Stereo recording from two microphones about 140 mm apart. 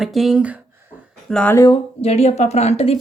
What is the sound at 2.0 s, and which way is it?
Speech, 50° left (ahead or behind).